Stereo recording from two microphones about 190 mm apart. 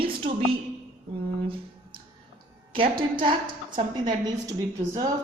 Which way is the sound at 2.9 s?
25° right (ahead or behind).